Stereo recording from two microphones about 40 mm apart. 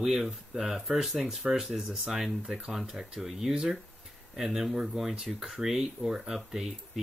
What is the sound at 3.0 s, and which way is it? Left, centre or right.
Speech, centre.